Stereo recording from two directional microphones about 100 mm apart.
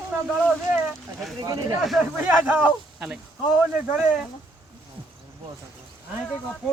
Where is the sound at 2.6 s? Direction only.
5° right (ahead or behind).